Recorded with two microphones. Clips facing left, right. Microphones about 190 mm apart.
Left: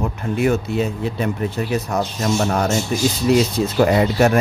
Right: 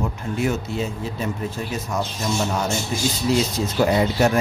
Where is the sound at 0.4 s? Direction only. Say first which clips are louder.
Left 5 dB; 60° left (ahead or behind).